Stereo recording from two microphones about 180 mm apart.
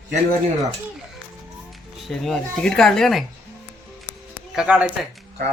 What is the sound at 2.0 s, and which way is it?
Speech, centre (ahead or behind).